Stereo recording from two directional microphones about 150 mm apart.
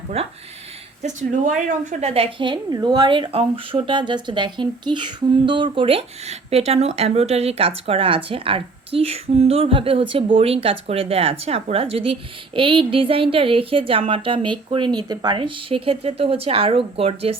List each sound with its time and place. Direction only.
0.1 s speech: 45° right (ahead or behind)
1.0 s a woman's voice: 55° right (ahead or behind)